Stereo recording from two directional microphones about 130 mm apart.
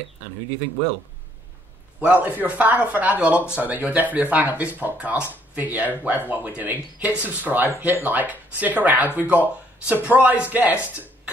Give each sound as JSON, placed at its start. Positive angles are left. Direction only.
{"t": 2.0, "sound": "speech", "side_deg": -10}